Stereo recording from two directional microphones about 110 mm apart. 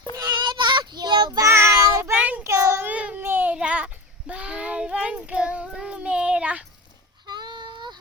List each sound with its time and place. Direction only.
0.2 s child singing: 40° right (ahead or behind)
1.5 s child singing: 25° right (ahead or behind)
2.1 s child singing: 15° right (ahead or behind)
2.4 s child singing: 25° right (ahead or behind)
2.9 s baby cry: 10° right (ahead or behind)
3.2 s child singing: 20° right (ahead or behind)
7.3 s child singing: 40° right (ahead or behind)